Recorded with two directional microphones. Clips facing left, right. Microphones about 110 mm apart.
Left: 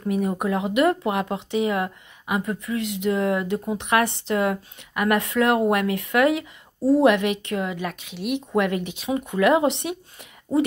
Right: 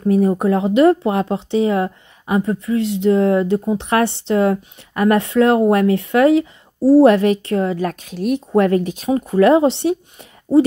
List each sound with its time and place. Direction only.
0.4 s speech: 30° right (ahead or behind)